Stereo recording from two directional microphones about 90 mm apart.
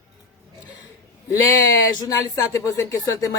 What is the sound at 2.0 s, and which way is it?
Speech, 40° left (ahead or behind).